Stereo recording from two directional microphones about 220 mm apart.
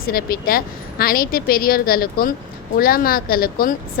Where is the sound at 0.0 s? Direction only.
40° left (ahead or behind).